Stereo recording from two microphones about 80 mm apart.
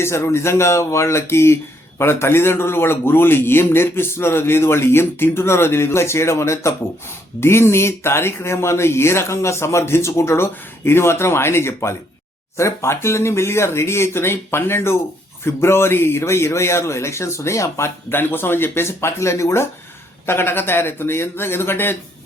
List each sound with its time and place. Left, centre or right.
0.0 s a man's voice: left